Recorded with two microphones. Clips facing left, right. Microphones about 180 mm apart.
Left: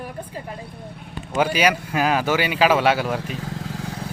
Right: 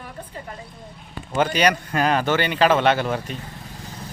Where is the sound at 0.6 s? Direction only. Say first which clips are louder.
Left 4 dB; 60° left (ahead or behind).